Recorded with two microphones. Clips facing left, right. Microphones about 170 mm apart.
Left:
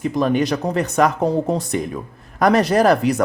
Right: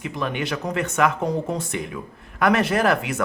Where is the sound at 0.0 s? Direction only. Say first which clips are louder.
Left 9 dB; 40° left (ahead or behind).